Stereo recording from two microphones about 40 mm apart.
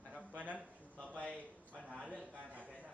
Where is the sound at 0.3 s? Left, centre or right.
Right.